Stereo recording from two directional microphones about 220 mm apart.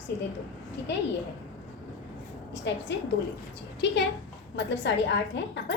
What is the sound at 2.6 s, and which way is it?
A woman's voice, 55° left (ahead or behind).